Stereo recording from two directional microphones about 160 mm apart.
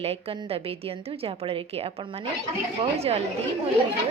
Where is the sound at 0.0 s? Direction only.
40° right (ahead or behind).